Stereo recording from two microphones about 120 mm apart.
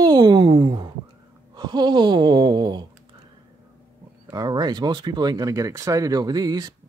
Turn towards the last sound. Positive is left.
turn(degrees=-30)  # may be behind; listen again after turning